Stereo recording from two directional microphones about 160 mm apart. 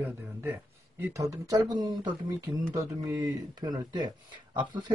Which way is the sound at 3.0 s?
25° right (ahead or behind).